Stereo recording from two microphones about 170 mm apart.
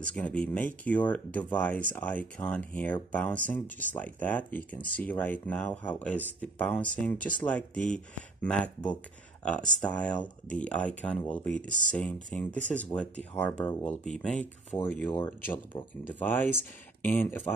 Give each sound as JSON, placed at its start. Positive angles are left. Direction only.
{"t": 0.0, "sound": "speech", "side_deg": 5}
{"t": 16.1, "sound": "speech", "side_deg": 10}